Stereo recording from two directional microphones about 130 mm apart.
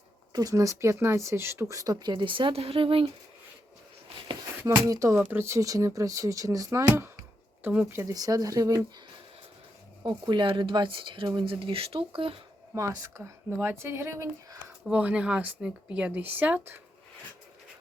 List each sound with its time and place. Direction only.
0.3 s speech: 25° right (ahead or behind); by 3.1 s 45° right (ahead or behind)
4.6 s speech: 25° right (ahead or behind)
10.0 s speech: 35° right (ahead or behind)
12.7 s speech: 25° right (ahead or behind)
14.8 s speech: 10° right (ahead or behind)